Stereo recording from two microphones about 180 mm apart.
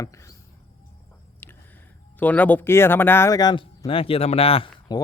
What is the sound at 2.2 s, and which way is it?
Speech, 10° left (ahead or behind).